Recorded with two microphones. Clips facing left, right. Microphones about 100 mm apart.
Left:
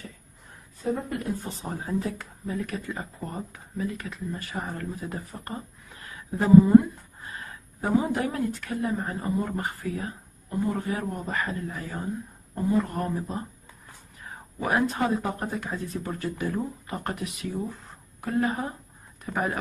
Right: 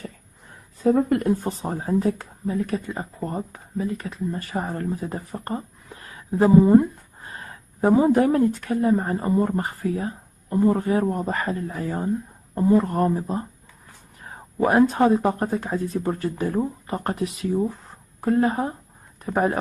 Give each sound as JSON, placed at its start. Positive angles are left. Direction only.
{"t": 0.8, "sound": "speech", "side_deg": -90}
{"t": 1.2, "sound": "a woman's voice", "side_deg": -50}
{"t": 14.7, "sound": "speech", "side_deg": -35}